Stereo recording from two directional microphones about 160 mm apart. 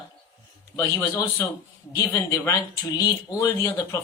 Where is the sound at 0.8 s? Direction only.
20° left (ahead or behind).